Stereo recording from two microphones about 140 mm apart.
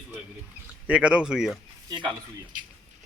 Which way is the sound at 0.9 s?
10° right (ahead or behind).